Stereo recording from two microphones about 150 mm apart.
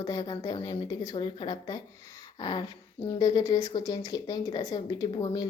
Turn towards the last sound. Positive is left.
turn(degrees=30)  # may be behind; listen again after turning